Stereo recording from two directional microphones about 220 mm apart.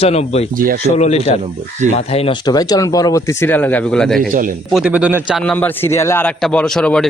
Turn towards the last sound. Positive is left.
turn(degrees=5)  # may be behind; listen again after turning